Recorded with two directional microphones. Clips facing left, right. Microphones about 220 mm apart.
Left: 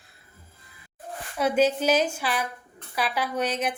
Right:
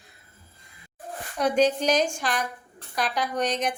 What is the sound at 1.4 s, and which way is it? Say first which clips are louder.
A woman's voice: even; 5° left (ahead or behind).